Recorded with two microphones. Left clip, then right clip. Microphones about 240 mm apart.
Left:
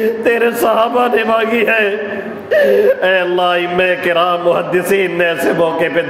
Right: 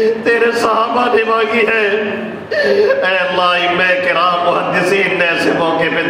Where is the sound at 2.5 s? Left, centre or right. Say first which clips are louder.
Left 2 dB; left.